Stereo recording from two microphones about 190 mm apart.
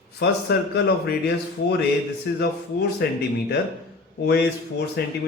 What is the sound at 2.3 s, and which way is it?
Speech, 60° left (ahead or behind).